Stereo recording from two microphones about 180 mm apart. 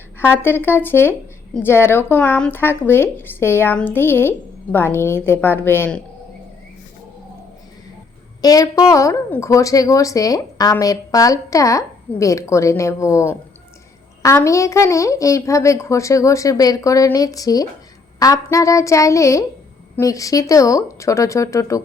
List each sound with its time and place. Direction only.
0.2 s speech: 10° left (ahead or behind)
8.4 s speech: 20° left (ahead or behind)